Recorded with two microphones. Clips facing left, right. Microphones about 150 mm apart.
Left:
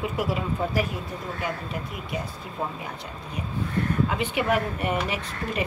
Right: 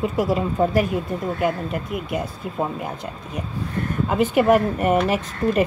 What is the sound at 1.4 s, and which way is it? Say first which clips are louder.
Speech: right 7 dB; 55° right (ahead or behind).